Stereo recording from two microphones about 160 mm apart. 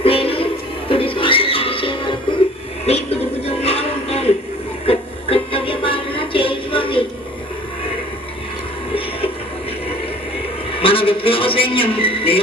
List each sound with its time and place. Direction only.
0.0 s music: 35° left (ahead or behind)
3.4 s music: 40° left (ahead or behind)
10.8 s a sound: 35° left (ahead or behind)